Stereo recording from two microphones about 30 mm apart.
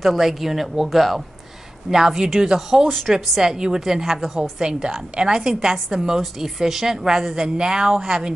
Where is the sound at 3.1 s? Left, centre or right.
Centre.